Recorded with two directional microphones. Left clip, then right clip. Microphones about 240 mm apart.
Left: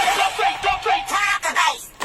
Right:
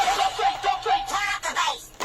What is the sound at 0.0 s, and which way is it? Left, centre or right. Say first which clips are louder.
Music: left 3 dB; centre.